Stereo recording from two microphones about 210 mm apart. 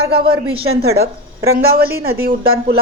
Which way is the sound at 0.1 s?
25° right (ahead or behind).